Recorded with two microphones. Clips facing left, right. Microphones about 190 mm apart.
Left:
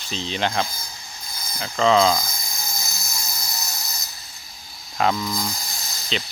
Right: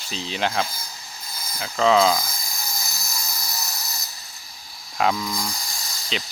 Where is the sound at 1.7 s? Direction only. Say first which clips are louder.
Even; centre (ahead or behind).